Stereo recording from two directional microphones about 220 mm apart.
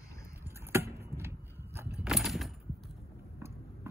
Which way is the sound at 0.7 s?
10° right (ahead or behind).